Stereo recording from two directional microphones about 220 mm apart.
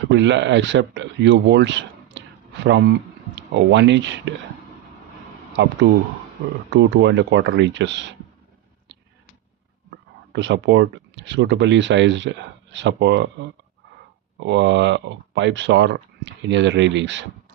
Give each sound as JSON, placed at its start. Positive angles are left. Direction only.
{"t": 0.1, "sound": "speech", "side_deg": -55}
{"t": 5.6, "sound": "speech", "side_deg": -50}
{"t": 6.7, "sound": "speech", "side_deg": -55}
{"t": 10.3, "sound": "speech", "side_deg": -55}
{"t": 14.3, "sound": "speech", "side_deg": -55}